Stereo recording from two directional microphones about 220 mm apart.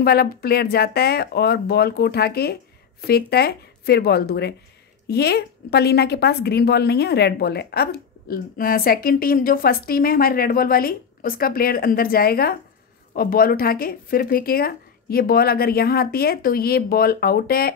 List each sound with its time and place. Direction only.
0.0 s a woman's voice: 45° left (ahead or behind)